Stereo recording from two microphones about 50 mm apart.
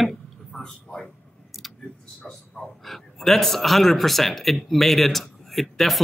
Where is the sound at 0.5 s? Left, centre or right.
Centre.